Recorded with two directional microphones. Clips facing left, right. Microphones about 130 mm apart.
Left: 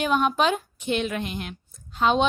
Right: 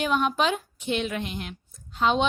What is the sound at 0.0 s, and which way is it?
A woman's voice, 45° left (ahead or behind).